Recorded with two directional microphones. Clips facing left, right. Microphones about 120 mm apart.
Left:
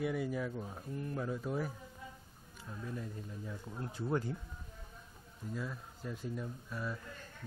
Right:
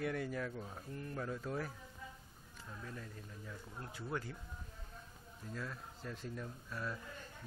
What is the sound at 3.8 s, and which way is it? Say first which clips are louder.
Speech: left 7 dB; 25° left (ahead or behind).